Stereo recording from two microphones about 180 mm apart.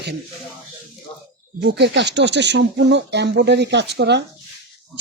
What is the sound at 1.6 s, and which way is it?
Speech, 70° right (ahead or behind).